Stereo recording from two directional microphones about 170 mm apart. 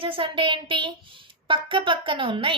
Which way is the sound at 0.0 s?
30° right (ahead or behind).